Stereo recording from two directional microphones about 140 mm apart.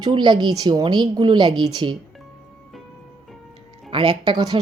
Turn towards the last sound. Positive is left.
turn(degrees=-30)  # may be behind; listen again after turning